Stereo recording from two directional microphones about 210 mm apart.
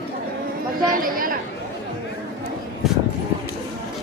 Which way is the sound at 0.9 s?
40° right (ahead or behind).